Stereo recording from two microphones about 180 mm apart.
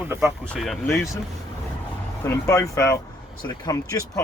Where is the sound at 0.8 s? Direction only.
15° left (ahead or behind).